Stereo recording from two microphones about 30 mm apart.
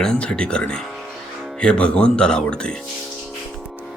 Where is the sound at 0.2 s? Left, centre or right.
Left.